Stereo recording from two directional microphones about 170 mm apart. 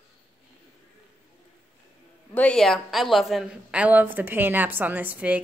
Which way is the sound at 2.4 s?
5° left (ahead or behind).